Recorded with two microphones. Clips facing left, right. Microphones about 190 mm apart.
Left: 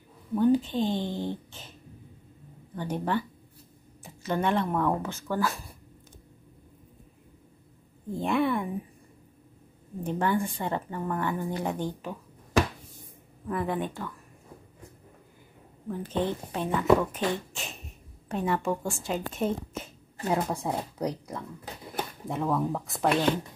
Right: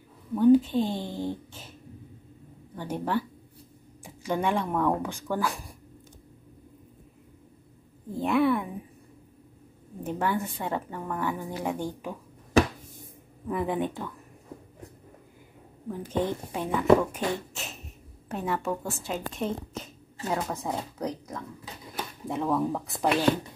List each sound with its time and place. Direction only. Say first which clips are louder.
0.3 s speech: right 4 dB; 5° right (ahead or behind)
5.0 s speech: even; 15° right (ahead or behind)
8.2 s a sound: right 2 dB; 5° right (ahead or behind)
10.0 s speech: left 1 dB; 5° right (ahead or behind)
13.5 s speech: right 2 dB; 15° right (ahead or behind)
15.9 s a woman's voice: even; 10° right (ahead or behind)
20.2 s speech: left 2 dB; 15° left (ahead or behind)
22.3 s a woman's voice: right 2 dB; centre (ahead or behind)